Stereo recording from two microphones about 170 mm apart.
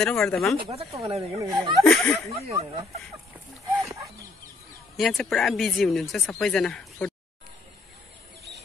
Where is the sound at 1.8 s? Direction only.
5° left (ahead or behind).